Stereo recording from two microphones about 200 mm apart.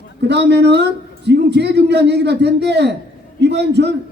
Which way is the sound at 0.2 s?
55° right (ahead or behind).